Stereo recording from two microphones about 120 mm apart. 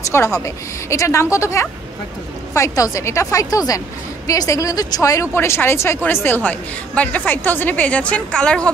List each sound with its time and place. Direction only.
0.1 s a woman's voice: 20° left (ahead or behind)